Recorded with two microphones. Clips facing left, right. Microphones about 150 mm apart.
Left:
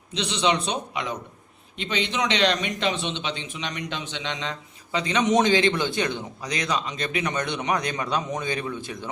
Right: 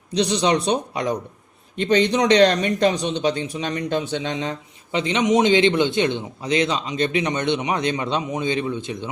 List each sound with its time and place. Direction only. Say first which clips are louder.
0.2 s a man's voice: right 5 dB; 35° right (ahead or behind)
1.7 s a man's voice: right 10 dB; 50° right (ahead or behind)
4.4 s a man's voice: right 6 dB; 25° right (ahead or behind)